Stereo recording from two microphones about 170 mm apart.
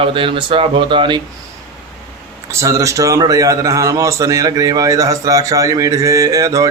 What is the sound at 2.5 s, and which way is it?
A man's voice, 20° right (ahead or behind).